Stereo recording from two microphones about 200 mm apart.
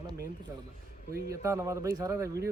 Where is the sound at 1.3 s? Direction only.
15° right (ahead or behind).